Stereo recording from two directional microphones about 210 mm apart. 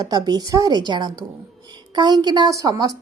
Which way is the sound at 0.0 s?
20° right (ahead or behind).